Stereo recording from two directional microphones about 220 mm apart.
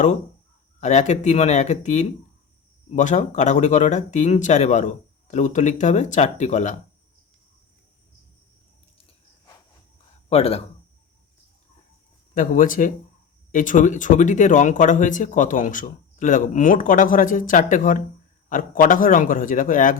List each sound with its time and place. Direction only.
0.8 s speech: 30° left (ahead or behind)
10.2 s speech: 30° left (ahead or behind)
12.3 s speech: 35° left (ahead or behind)